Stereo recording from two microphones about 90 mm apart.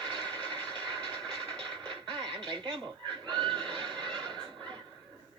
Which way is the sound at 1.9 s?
10° left (ahead or behind).